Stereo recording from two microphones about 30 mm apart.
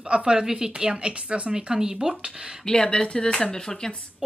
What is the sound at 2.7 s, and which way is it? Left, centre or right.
Speech, left.